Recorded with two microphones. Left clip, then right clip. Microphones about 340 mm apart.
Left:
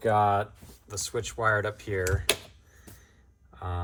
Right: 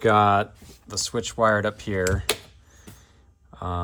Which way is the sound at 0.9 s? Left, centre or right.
Centre.